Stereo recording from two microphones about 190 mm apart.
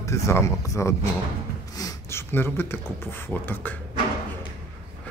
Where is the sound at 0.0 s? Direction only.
15° left (ahead or behind).